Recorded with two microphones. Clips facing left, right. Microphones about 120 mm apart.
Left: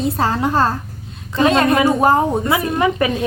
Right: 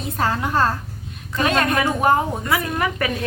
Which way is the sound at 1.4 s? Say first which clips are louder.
Left 6 dB; 25° left (ahead or behind).